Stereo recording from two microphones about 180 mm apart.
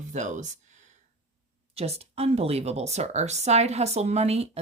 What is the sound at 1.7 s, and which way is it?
Speech, 35° right (ahead or behind).